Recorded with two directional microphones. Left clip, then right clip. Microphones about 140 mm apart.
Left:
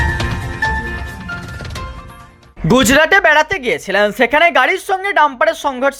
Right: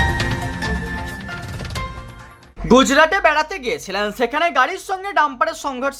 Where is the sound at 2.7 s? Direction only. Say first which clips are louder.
Left 2 dB; 40° left (ahead or behind).